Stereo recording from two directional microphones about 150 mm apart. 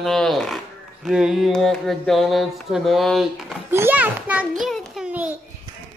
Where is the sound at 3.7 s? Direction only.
15° right (ahead or behind).